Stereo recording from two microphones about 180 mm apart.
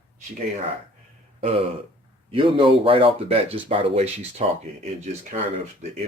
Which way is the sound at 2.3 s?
30° right (ahead or behind).